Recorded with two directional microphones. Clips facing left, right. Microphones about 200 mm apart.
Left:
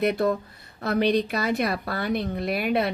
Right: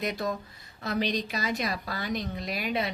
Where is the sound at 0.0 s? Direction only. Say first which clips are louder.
Left 8 dB; 60° left (ahead or behind).